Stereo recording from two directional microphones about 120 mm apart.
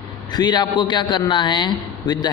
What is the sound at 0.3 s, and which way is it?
A man's voice, 35° left (ahead or behind).